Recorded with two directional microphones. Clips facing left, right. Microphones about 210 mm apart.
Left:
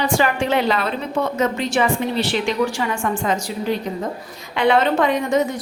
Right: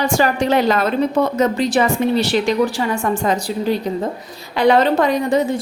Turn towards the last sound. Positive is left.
turn(degrees=-35)  # may be behind; listen again after turning